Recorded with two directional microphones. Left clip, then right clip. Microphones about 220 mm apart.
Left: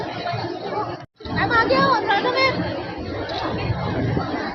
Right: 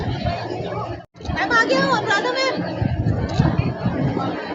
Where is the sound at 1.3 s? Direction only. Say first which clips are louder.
Right 1 dB; 45° right (ahead or behind).